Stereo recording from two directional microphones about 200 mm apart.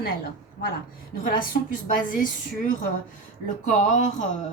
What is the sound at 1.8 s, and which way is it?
A woman's voice, 40° left (ahead or behind).